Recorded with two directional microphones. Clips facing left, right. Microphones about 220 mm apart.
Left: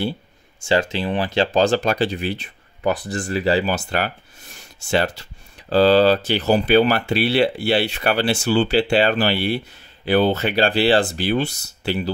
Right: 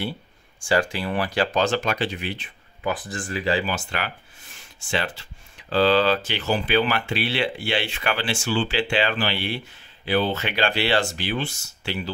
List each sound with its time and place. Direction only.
0.6 s speech: 25° left (ahead or behind)